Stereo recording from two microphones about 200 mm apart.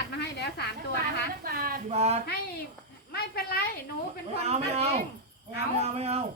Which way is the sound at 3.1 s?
50° left (ahead or behind).